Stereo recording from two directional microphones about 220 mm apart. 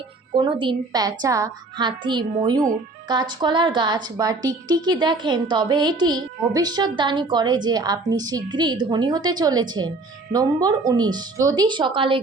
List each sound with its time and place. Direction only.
0.3 s a woman's voice: 20° right (ahead or behind)